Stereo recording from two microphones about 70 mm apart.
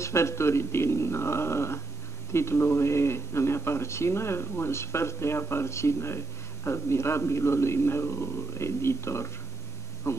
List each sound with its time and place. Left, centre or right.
0.0 s speech: left